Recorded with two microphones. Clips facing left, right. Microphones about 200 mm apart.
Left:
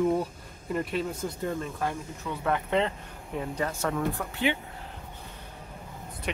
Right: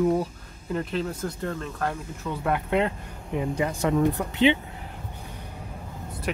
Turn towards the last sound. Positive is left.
turn(degrees=-5)  # may be behind; listen again after turning